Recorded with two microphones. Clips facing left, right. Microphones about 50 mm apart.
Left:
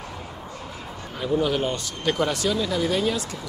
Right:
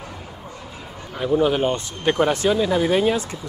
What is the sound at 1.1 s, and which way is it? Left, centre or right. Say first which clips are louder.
Speech: right 4 dB; centre.